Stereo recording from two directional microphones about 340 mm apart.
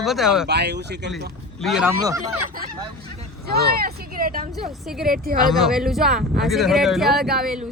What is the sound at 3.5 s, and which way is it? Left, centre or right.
Speech, right.